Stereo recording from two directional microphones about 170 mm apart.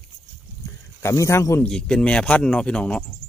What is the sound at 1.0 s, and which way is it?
Speech, 15° left (ahead or behind).